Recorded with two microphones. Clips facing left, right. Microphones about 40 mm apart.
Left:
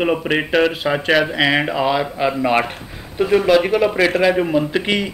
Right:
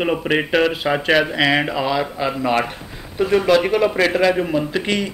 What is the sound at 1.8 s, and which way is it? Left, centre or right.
A man's voice, centre.